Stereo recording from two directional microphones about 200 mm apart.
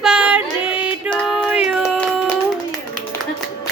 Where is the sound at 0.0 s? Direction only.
5° right (ahead or behind).